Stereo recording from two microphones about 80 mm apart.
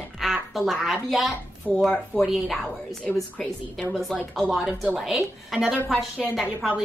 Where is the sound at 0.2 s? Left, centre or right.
Centre.